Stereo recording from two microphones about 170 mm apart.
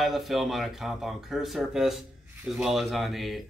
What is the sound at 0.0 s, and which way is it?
Speech, centre (ahead or behind).